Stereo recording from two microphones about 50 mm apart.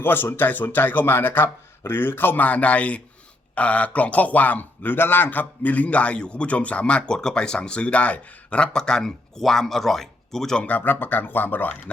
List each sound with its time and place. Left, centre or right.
0.0 s speech: left
8.7 s speech: centre
10.6 s speech: left